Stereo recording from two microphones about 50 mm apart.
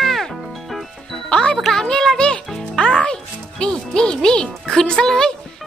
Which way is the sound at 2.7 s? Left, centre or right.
Centre.